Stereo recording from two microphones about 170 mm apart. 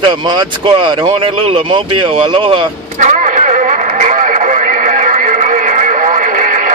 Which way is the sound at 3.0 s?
45° right (ahead or behind).